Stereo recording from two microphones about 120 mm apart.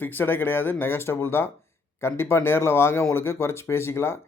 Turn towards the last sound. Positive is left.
turn(degrees=20)  # may be behind; listen again after turning